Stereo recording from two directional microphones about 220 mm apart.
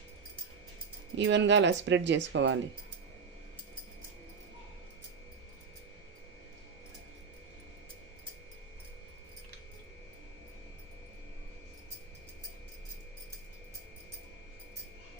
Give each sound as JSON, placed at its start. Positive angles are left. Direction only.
{"t": 1.1, "sound": "speech", "side_deg": -55}